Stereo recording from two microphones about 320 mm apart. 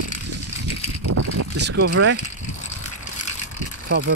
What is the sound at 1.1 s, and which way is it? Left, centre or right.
Vehicle, right.